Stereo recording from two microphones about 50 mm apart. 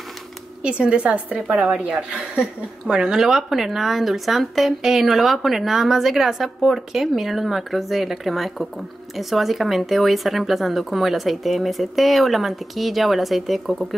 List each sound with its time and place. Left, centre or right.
0.6 s a woman's voice: right; by 13.8 s centre